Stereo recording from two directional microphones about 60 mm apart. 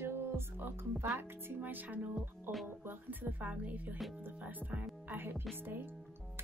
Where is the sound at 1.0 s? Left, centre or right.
Right.